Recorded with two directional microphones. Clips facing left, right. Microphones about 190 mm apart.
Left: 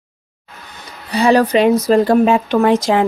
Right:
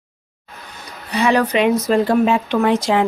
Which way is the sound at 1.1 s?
35° left (ahead or behind).